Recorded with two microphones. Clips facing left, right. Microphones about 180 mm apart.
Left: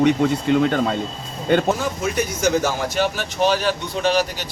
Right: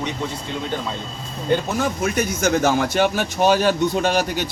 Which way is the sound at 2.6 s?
55° right (ahead or behind).